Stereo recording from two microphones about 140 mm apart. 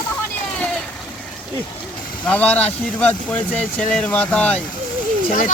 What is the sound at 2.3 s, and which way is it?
Speech, 10° left (ahead or behind).